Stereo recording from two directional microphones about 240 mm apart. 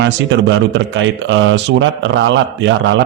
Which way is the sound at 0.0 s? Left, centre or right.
Right.